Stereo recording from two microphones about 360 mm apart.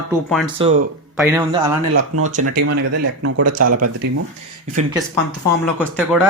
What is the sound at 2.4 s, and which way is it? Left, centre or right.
Speech, right.